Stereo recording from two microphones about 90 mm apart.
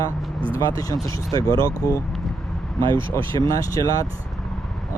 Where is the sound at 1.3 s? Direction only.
40° left (ahead or behind).